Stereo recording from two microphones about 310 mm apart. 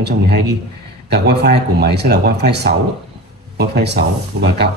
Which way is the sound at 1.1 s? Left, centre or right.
Right.